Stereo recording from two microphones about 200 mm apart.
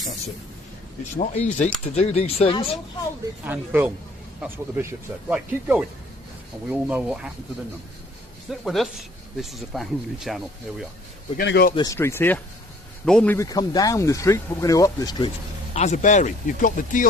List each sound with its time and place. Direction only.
1.2 s speech: 35° left (ahead or behind)
3.4 s speech: 10° right (ahead or behind)
8.4 s speech: centre (ahead or behind)
11.3 s a man's voice: 50° left (ahead or behind)
11.7 s speech: 20° left (ahead or behind)
15.7 s speech: 35° left (ahead or behind)